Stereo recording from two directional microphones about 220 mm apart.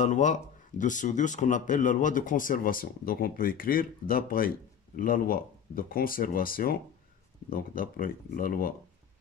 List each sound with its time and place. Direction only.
0.0 s speech: 35° left (ahead or behind)